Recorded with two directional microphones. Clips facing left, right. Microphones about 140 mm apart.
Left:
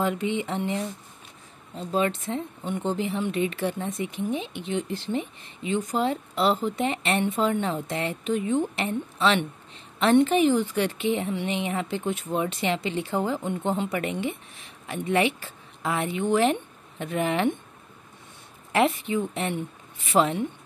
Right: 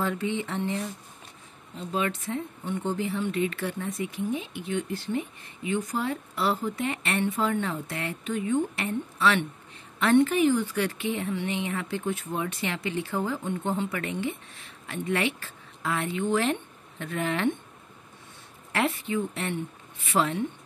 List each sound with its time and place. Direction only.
0.0 s a woman's voice: 20° left (ahead or behind)
1.9 s a woman's voice: 30° left (ahead or behind)
18.7 s a woman's voice: 20° left (ahead or behind)